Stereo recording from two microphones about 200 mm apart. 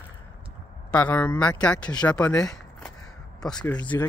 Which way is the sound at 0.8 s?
5° left (ahead or behind).